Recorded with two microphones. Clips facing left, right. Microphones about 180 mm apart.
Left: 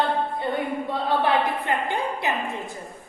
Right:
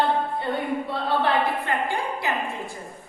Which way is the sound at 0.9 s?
15° left (ahead or behind).